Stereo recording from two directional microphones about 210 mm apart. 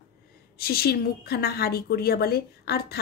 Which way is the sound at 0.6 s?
45° left (ahead or behind).